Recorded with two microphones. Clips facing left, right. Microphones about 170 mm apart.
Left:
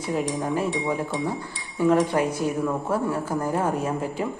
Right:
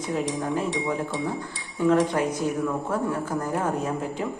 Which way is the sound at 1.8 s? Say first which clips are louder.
Left 1 dB; 10° left (ahead or behind).